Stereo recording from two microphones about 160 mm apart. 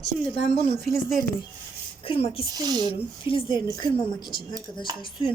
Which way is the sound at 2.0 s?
35° left (ahead or behind).